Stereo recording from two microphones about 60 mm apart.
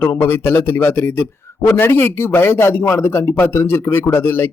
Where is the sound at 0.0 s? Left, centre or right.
Left.